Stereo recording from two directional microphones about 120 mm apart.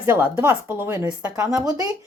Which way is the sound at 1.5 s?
30° right (ahead or behind).